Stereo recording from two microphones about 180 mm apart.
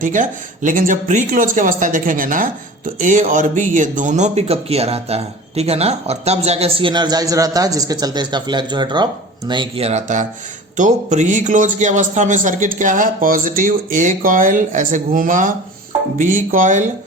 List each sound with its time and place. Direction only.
0.0 s a man's voice: 45° right (ahead or behind)